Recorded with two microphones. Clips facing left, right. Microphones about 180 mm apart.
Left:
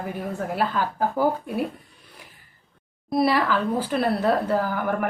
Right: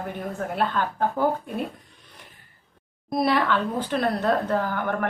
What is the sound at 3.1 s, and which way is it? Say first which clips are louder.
A woman's voice: left 1 dB; centre (ahead or behind).